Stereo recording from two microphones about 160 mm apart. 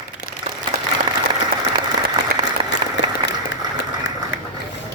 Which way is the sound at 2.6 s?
30° right (ahead or behind).